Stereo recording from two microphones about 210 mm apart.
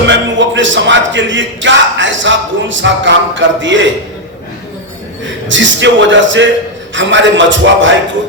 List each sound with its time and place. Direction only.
0.1 s a man's voice: 60° right (ahead or behind)
5.5 s a man's voice: 60° right (ahead or behind)